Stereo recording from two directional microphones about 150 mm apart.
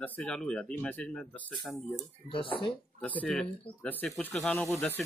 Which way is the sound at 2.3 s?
35° left (ahead or behind).